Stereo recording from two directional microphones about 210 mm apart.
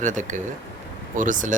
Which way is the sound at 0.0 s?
35° right (ahead or behind).